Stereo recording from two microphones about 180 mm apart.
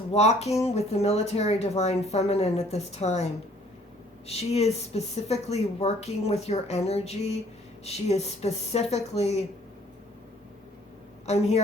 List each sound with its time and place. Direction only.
0.1 s a woman's voice: 35° left (ahead or behind)
4.3 s a woman's voice: 35° left (ahead or behind)
11.3 s a woman's voice: 35° left (ahead or behind)